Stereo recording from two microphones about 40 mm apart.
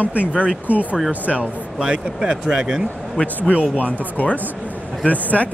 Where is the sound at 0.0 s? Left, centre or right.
Right.